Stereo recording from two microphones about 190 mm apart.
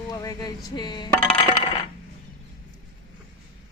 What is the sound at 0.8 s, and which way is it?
Dishes, 25° left (ahead or behind).